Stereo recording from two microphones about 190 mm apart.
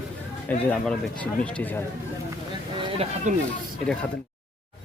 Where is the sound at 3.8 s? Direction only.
5° left (ahead or behind).